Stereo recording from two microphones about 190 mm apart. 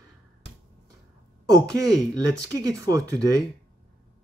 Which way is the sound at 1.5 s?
20° right (ahead or behind).